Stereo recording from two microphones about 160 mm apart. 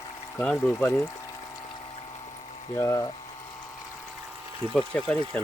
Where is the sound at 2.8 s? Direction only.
15° left (ahead or behind).